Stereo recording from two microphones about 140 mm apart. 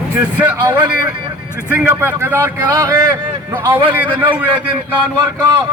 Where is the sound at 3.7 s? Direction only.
15° right (ahead or behind).